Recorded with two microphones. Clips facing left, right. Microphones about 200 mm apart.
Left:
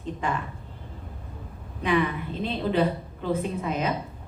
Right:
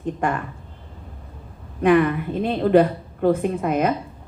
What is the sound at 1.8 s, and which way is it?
Speech, 55° right (ahead or behind).